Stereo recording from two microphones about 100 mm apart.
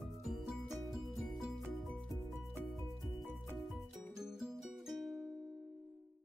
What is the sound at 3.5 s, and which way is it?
Music, centre (ahead or behind).